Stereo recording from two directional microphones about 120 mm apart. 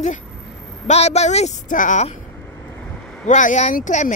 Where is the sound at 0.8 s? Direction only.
65° left (ahead or behind); by 2.0 s 90° left.